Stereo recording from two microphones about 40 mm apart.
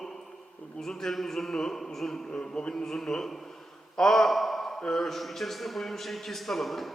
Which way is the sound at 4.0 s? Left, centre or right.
Centre.